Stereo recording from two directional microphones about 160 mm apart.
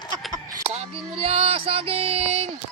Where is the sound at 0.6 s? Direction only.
40° right (ahead or behind).